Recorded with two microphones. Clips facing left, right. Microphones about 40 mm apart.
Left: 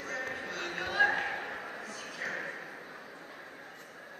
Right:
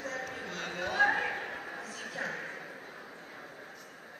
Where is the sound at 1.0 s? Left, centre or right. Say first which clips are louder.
Right 1 dB; centre.